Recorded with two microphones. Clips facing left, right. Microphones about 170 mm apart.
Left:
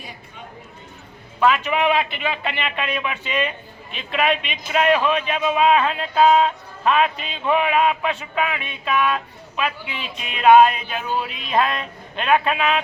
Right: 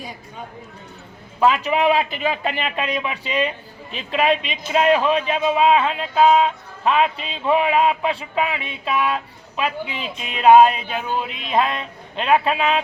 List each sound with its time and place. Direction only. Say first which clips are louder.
1.4 s a man's voice: right 1 dB; 30° right (ahead or behind)